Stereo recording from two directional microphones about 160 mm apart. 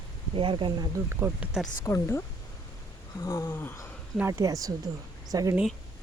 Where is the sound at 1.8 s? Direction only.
15° left (ahead or behind).